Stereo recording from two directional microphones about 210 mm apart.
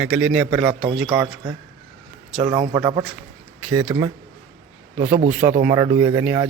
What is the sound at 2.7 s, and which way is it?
Speech, 20° right (ahead or behind).